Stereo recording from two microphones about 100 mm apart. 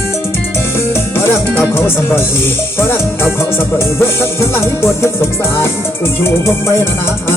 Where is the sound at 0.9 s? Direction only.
25° left (ahead or behind).